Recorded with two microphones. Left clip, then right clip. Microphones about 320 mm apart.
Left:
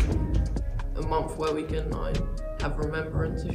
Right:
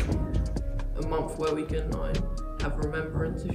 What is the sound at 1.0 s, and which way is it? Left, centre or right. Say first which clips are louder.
Music: left 2 dB; centre.